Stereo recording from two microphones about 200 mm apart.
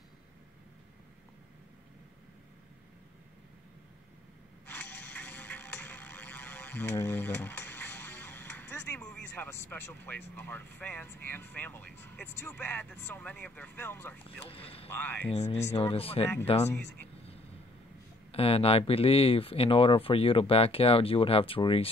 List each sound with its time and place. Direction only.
4.6 s music: 10° left (ahead or behind)
10.3 s speech: 10° left (ahead or behind)
14.5 s speech: 30° left (ahead or behind)
14.9 s speech: 10° left (ahead or behind)
15.3 s speech: 35° left (ahead or behind)
18.3 s speech: 30° left (ahead or behind)